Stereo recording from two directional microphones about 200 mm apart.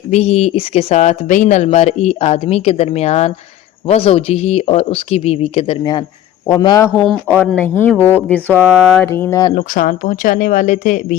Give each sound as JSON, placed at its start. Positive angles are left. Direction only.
{"t": 0.1, "sound": "speech", "side_deg": 30}
{"t": 6.8, "sound": "speech", "side_deg": 0}
{"t": 9.6, "sound": "speech", "side_deg": 40}